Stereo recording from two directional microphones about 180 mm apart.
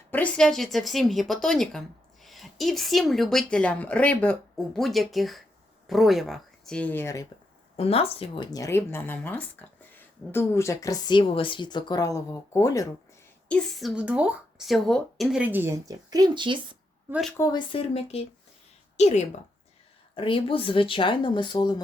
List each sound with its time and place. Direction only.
0.1 s a woman's voice: 5° left (ahead or behind)
7.8 s speech: 35° left (ahead or behind)
8.5 s speech: 15° left (ahead or behind)
13.5 s speech: 5° left (ahead or behind); by 16.7 s 25° right (ahead or behind)
17.1 s a woman's voice: centre (ahead or behind)
17.3 s speech: 20° left (ahead or behind)